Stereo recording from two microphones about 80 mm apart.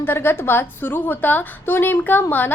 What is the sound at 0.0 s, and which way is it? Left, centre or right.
A woman's voice, left.